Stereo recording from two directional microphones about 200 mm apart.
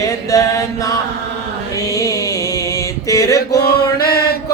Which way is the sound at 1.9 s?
15° left (ahead or behind).